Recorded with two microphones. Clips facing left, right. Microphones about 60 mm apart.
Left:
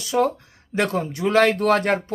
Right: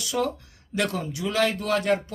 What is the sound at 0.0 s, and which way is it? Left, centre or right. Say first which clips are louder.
Speech: left 6 dB; left.